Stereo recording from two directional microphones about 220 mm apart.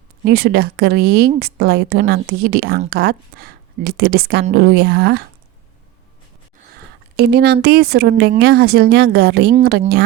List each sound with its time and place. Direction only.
0.3 s speech: 45° right (ahead or behind)
6.7 s speech: 45° right (ahead or behind)